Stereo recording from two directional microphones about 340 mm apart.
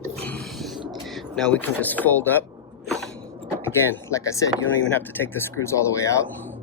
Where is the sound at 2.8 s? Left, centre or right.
Centre.